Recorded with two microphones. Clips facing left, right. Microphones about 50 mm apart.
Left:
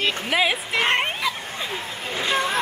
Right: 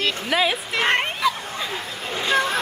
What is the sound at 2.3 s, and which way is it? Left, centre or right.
Vehicle, centre.